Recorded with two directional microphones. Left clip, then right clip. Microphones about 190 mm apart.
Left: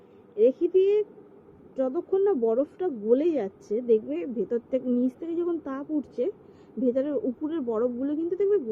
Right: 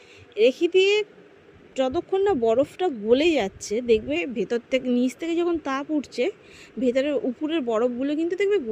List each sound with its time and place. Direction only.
0.3 s speech: 40° right (ahead or behind)
4.1 s speech: 50° right (ahead or behind)
4.4 s speech: 35° right (ahead or behind)